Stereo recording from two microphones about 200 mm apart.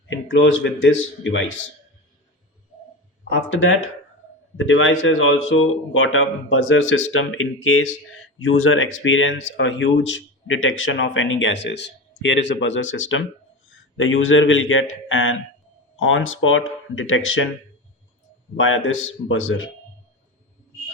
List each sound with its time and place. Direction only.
0.1 s speech: 70° left (ahead or behind)
3.3 s speech: 75° left (ahead or behind)
18.5 s speech: 80° left